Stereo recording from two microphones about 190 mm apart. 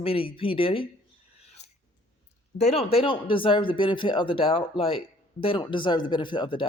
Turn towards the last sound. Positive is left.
turn(degrees=25)  # may be behind; listen again after turning